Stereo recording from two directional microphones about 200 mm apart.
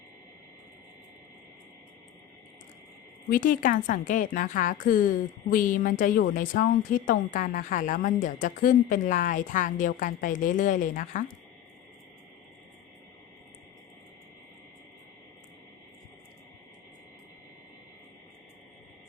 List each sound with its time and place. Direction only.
3.2 s a woman's voice: 45° left (ahead or behind)